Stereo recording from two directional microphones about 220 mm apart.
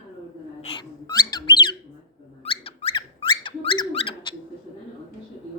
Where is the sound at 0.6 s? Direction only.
25° left (ahead or behind).